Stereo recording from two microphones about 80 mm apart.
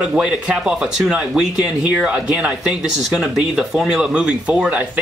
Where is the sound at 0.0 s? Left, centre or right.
Centre.